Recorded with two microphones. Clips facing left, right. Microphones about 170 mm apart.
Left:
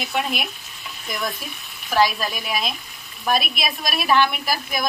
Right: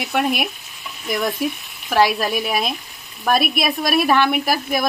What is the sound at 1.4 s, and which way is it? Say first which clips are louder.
A woman's voice: right 13 dB; 65° right (ahead or behind).